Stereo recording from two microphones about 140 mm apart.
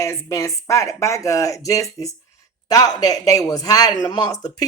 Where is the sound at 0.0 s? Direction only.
20° left (ahead or behind).